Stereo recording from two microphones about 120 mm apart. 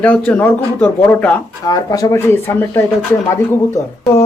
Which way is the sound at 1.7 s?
30° left (ahead or behind).